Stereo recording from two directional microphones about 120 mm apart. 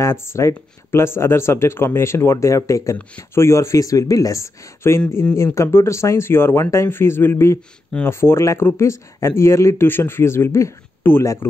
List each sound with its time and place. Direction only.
0.0 s speech: 20° left (ahead or behind)